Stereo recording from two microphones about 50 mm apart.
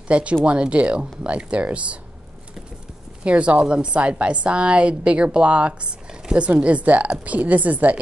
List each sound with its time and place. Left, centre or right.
0.1 s a woman's voice: right
3.3 s a woman's voice: right